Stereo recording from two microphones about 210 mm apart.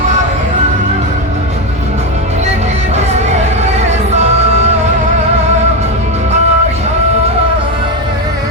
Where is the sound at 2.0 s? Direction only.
30° right (ahead or behind).